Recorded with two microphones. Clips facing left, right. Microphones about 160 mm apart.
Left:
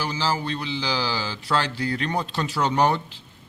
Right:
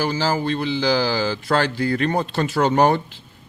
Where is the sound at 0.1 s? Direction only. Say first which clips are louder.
Right 5 dB; 50° right (ahead or behind).